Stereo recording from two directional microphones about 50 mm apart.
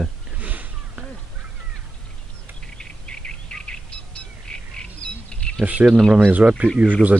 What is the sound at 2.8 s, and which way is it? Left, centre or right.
Bird, centre.